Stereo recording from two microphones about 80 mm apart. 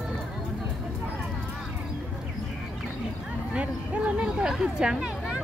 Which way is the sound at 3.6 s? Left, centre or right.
Centre.